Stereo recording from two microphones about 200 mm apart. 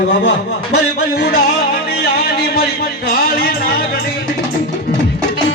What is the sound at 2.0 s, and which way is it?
Speech, 50° left (ahead or behind).